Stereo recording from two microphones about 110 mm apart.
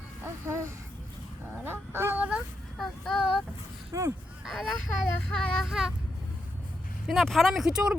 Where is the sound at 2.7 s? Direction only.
5° left (ahead or behind).